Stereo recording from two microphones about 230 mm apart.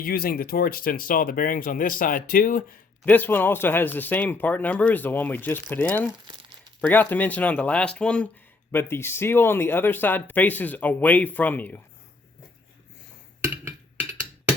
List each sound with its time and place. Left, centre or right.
0.0 s speech: left
3.1 s speech: centre
13.5 s wood block: centre